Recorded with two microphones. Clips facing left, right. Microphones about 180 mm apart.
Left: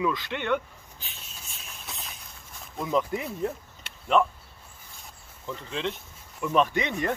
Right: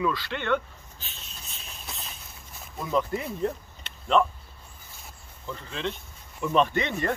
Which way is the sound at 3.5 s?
10° left (ahead or behind).